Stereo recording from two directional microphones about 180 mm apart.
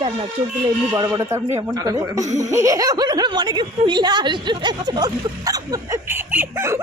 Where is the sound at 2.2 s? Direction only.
40° right (ahead or behind).